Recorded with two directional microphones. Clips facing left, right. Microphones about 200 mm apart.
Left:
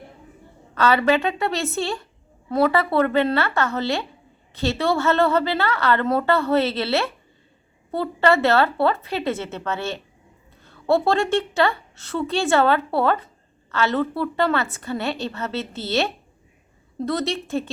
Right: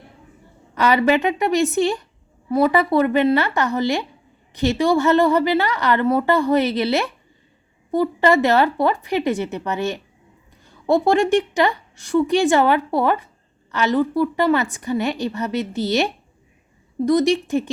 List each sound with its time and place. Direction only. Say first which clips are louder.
0.7 s a woman's voice: right 2 dB; 15° right (ahead or behind)